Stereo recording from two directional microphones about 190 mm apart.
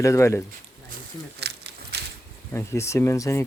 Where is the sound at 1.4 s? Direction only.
60° right (ahead or behind).